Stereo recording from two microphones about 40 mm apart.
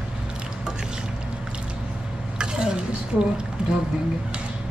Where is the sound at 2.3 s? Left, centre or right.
Right.